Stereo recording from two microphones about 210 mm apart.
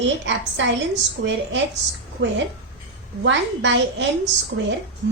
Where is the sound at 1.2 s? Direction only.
70° right (ahead or behind).